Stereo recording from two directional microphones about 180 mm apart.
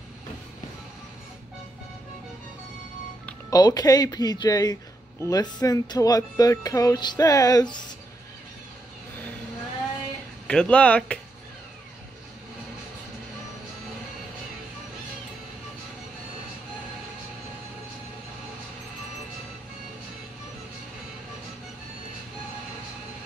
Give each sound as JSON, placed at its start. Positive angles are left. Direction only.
{"t": 3.4, "sound": "speech", "side_deg": 20}
{"t": 10.4, "sound": "speech", "side_deg": 5}